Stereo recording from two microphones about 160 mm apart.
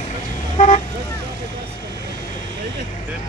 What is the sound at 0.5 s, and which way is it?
Speech, 40° left (ahead or behind).